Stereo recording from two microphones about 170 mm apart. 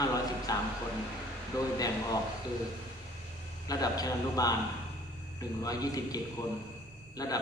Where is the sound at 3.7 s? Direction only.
20° left (ahead or behind).